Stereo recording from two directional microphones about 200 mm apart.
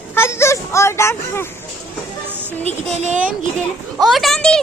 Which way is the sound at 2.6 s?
35° right (ahead or behind).